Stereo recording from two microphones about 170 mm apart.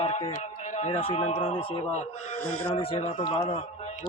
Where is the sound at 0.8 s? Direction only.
45° left (ahead or behind).